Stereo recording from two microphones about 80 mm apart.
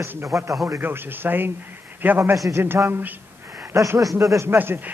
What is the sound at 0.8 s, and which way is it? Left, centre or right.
A woman's voice, right.